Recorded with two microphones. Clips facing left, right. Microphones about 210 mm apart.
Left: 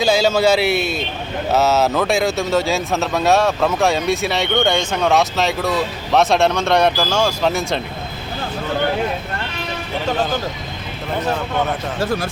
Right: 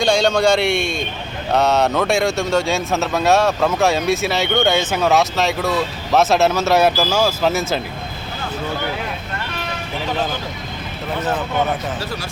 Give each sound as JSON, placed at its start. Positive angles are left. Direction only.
{"t": 0.0, "sound": "speech", "side_deg": 5}
{"t": 11.9, "sound": "speech", "side_deg": 50}